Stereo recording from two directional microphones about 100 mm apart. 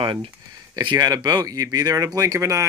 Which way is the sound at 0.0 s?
55° right (ahead or behind).